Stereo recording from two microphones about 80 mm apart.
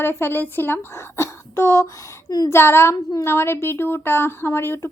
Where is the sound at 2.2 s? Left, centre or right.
Left.